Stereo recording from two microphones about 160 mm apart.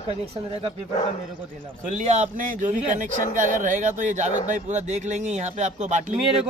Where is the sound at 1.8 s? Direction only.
45° right (ahead or behind).